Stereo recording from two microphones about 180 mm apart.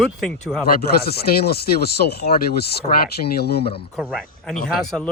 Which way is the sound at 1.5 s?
60° left (ahead or behind).